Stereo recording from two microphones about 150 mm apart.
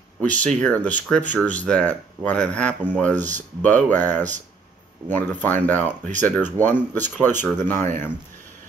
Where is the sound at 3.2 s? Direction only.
55° right (ahead or behind).